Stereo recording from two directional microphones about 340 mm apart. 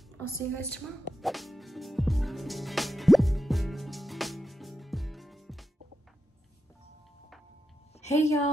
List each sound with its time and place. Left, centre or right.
0.3 s a woman's voice: centre
1.2 s music: centre
8.0 s a woman's voice: centre